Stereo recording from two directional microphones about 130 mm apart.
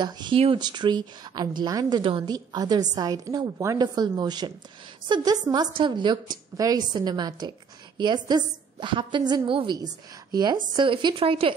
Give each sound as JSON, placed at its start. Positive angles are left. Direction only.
{"t": 0.0, "sound": "speech", "side_deg": -40}